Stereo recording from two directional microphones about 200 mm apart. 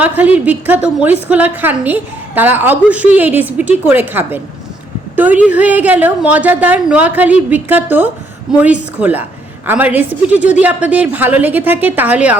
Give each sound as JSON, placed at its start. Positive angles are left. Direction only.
{"t": 0.0, "sound": "a woman's voice", "side_deg": -10}